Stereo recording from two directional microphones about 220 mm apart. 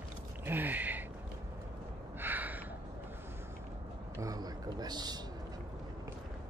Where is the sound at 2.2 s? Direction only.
10° right (ahead or behind).